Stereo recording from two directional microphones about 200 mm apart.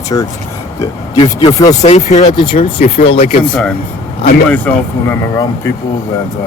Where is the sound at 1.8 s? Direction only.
35° left (ahead or behind).